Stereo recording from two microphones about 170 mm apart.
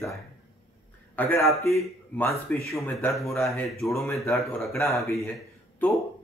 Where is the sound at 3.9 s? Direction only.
15° left (ahead or behind).